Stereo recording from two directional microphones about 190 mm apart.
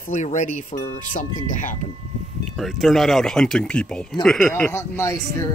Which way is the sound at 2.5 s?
Centre (ahead or behind).